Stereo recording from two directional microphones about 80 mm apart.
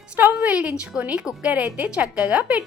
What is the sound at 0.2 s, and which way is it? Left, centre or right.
A woman's voice, centre.